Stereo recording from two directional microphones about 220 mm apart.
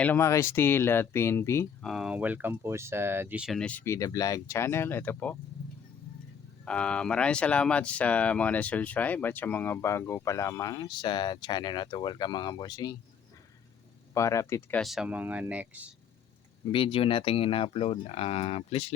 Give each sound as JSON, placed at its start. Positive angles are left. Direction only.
{"t": 0.0, "sound": "speech", "side_deg": 10}
{"t": 1.9, "sound": "speech", "side_deg": -5}
{"t": 6.7, "sound": "speech", "side_deg": 5}
{"t": 14.1, "sound": "speech", "side_deg": 15}
{"t": 14.8, "sound": "speech", "side_deg": 0}
{"t": 16.7, "sound": "speech", "side_deg": 25}